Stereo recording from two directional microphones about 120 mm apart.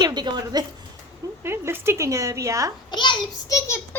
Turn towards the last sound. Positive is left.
turn(degrees=25)  # may be behind; listen again after turning